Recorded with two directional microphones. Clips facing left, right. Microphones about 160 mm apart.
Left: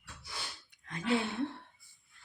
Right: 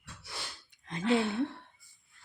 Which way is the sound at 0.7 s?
20° right (ahead or behind).